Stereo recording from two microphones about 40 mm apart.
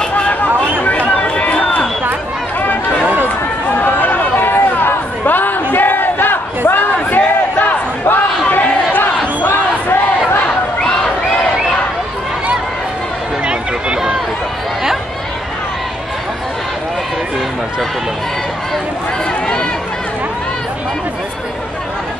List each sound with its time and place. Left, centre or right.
0.7 s chatter: left
3.8 s chatter: left
8.0 s crowd: left
9.5 s crowd: left
13.5 s a sound: right
19.4 s run: left